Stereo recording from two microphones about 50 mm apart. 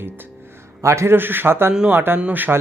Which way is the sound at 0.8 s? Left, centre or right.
Right.